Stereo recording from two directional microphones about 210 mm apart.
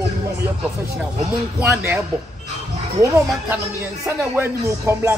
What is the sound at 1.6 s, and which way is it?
A man's voice, 10° right (ahead or behind).